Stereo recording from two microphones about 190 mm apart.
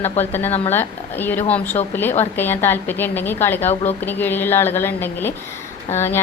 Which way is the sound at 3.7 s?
35° left (ahead or behind).